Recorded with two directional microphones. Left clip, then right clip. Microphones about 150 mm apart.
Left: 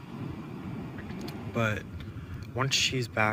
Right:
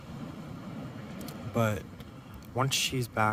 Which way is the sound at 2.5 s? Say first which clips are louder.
Left 2 dB; 55° right (ahead or behind).